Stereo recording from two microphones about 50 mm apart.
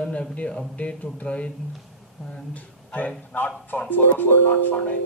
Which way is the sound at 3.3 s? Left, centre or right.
Left.